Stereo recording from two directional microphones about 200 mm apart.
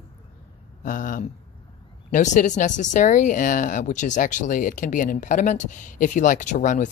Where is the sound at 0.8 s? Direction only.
40° left (ahead or behind).